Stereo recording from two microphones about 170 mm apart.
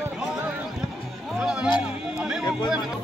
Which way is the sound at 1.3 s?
5° right (ahead or behind).